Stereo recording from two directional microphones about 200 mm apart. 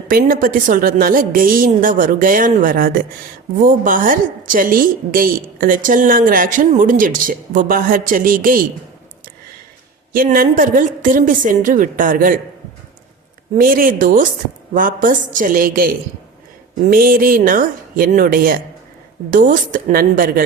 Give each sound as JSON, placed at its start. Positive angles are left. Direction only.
{"t": 0.1, "sound": "a woman's voice", "side_deg": -45}
{"t": 10.1, "sound": "a woman's voice", "side_deg": -45}
{"t": 13.6, "sound": "a woman's voice", "side_deg": -45}
{"t": 16.9, "sound": "a woman's voice", "side_deg": -45}